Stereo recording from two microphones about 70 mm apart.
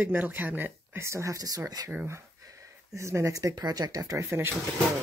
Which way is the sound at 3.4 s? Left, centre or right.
Right.